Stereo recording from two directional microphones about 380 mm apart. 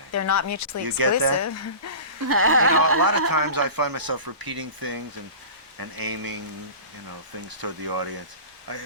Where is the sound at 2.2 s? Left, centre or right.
Right.